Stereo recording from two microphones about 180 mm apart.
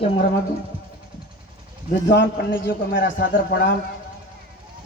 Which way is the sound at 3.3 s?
60° left (ahead or behind).